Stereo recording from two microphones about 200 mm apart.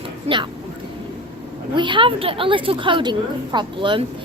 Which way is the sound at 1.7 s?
25° right (ahead or behind).